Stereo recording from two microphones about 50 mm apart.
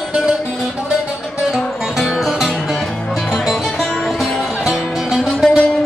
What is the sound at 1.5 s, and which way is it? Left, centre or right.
Music, centre.